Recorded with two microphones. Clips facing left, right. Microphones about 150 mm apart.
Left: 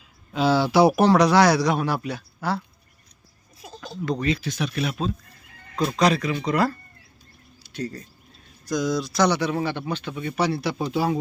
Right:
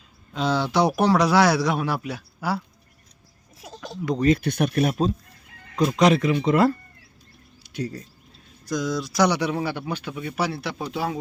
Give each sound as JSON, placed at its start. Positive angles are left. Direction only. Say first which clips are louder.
{"t": 0.3, "sound": "speech", "louder": "left 4 dB", "side_deg": 5}
{"t": 4.4, "sound": "speech", "louder": "right 5 dB", "side_deg": -60}
{"t": 6.0, "sound": "speech", "louder": "right 3 dB", "side_deg": -20}
{"t": 7.6, "sound": "bird", "louder": "right 1 dB", "side_deg": -10}
{"t": 8.7, "sound": "speech", "louder": "left 2 dB", "side_deg": 0}
{"t": 9.1, "sound": "speech", "louder": "right 1 dB", "side_deg": -15}